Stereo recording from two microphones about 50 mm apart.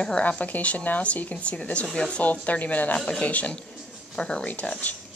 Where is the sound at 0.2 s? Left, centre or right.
Left.